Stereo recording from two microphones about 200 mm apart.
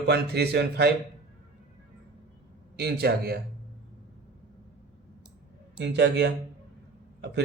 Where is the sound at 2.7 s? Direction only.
50° right (ahead or behind).